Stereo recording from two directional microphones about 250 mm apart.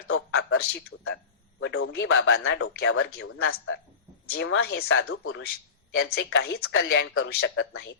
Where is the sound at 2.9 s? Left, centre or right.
Left.